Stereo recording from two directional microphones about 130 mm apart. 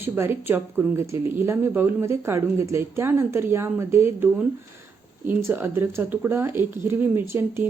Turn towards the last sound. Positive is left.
turn(degrees=-20)  # may be behind; listen again after turning